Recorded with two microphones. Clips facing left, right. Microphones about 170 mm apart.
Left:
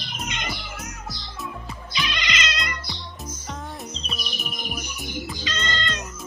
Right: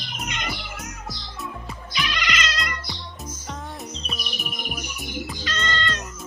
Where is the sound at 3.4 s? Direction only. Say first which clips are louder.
Even; centre (ahead or behind).